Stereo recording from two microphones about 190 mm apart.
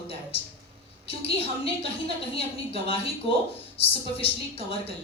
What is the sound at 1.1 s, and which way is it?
A woman's voice, 30° left (ahead or behind).